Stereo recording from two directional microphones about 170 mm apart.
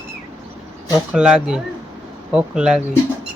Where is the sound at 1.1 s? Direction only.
5° right (ahead or behind).